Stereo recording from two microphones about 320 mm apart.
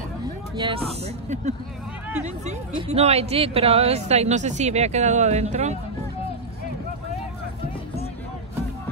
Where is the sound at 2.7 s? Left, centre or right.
Centre.